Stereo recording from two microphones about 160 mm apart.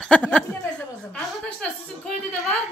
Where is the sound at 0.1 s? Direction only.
5° left (ahead or behind).